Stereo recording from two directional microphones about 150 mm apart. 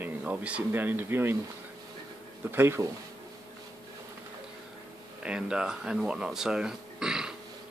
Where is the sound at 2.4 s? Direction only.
15° right (ahead or behind).